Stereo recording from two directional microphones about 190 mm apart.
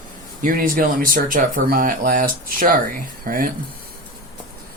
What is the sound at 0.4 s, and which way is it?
Speech, 45° right (ahead or behind).